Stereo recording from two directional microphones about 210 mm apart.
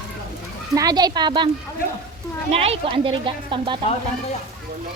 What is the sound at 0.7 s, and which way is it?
A woman's voice, 15° right (ahead or behind).